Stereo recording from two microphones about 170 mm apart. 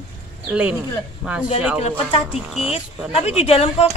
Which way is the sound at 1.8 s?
40° left (ahead or behind).